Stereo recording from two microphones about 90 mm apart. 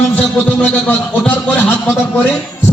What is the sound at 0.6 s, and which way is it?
A man's voice, 15° left (ahead or behind).